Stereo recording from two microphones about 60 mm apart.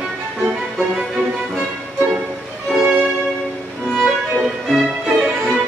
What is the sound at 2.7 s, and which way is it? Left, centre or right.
Music, centre.